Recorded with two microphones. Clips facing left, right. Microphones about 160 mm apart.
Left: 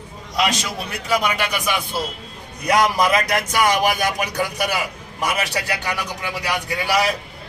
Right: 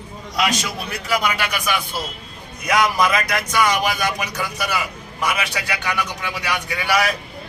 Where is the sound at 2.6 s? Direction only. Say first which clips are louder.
Left 1 dB; 40° left (ahead or behind).